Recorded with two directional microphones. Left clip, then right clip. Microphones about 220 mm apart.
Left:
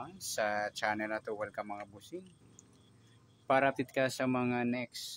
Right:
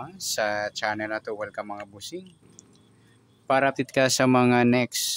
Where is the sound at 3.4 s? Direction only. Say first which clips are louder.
Right 7 dB; 10° right (ahead or behind); by 5.0 s 30° right (ahead or behind).